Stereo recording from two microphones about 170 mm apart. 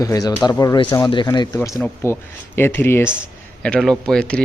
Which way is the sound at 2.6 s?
15° left (ahead or behind).